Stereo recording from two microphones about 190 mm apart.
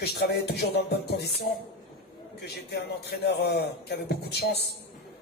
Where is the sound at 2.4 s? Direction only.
60° left (ahead or behind).